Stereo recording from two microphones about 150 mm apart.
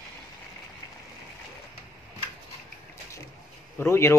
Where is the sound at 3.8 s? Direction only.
15° left (ahead or behind).